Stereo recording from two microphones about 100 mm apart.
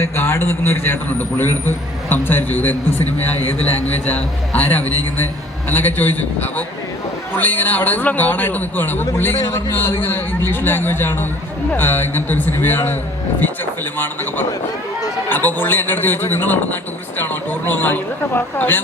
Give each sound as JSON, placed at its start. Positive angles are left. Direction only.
{"t": 0.0, "sound": "a man's voice", "side_deg": 25}
{"t": 4.0, "sound": "a man's voice", "side_deg": 15}
{"t": 15.3, "sound": "a man's voice", "side_deg": 20}